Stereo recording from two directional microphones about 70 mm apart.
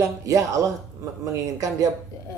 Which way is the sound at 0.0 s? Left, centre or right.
Right.